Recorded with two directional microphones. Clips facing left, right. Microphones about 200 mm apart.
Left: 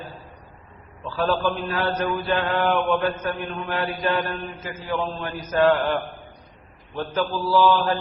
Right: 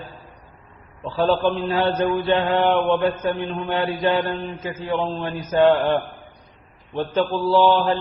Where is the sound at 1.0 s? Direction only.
25° right (ahead or behind).